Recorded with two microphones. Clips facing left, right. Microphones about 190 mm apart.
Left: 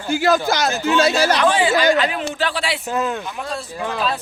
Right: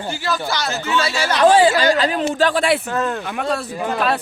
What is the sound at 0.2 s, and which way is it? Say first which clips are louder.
Speech: left 7 dB; 45° left (ahead or behind).